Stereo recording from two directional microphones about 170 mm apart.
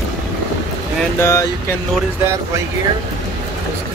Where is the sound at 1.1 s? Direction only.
15° left (ahead or behind).